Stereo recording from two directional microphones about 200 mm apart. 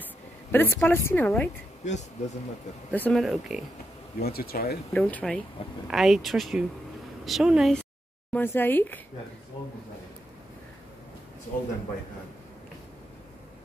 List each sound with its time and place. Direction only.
0.5 s a woman's voice: 10° left (ahead or behind)
1.9 s speech: 35° left (ahead or behind)
2.9 s speech: 5° left (ahead or behind)
4.2 s speech: 50° left (ahead or behind)
4.9 s speech: 5° left (ahead or behind)
8.3 s a woman's voice: 10° left (ahead or behind)